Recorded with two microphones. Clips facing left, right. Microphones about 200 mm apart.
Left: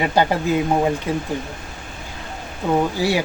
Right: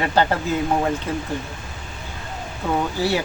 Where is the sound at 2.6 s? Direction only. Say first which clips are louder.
Left 3 dB; 15° left (ahead or behind).